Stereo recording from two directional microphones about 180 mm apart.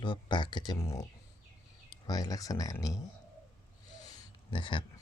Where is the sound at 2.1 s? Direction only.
20° left (ahead or behind).